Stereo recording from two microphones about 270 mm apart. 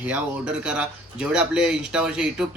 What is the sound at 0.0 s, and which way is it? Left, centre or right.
Speech, centre.